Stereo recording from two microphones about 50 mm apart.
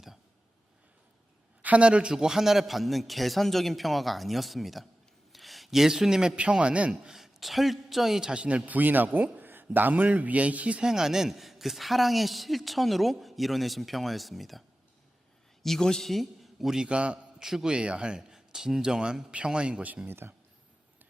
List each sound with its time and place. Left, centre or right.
1.6 s speech: right; by 4.9 s centre
5.3 s a sound: centre
6.3 s a man's voice: right
7.1 s a man's voice: centre; by 10.8 s right
10.8 s speech: centre
15.6 s a man's voice: centre
16.8 s a man's voice: right
17.4 s a man's voice: centre
17.7 s a man's voice: centre
20.1 s speech: right